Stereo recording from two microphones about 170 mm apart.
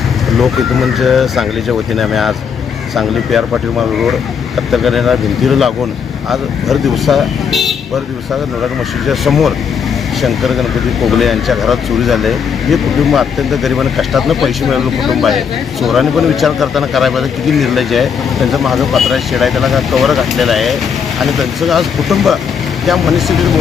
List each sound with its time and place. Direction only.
0.3 s speech: centre (ahead or behind)
9.0 s speech: centre (ahead or behind)